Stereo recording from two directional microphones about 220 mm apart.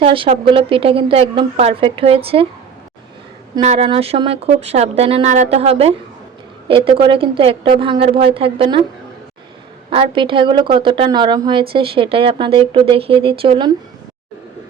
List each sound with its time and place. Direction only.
0.0 s speech: 25° right (ahead or behind)
3.6 s speech: 30° right (ahead or behind)
9.9 s speech: 25° right (ahead or behind)